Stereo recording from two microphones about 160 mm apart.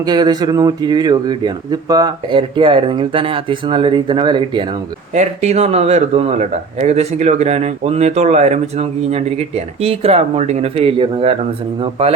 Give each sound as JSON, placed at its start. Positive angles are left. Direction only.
{"t": 0.0, "sound": "speech", "side_deg": -25}
{"t": 5.1, "sound": "speech", "side_deg": -45}